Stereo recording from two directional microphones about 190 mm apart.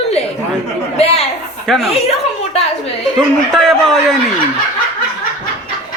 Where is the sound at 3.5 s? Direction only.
Centre (ahead or behind).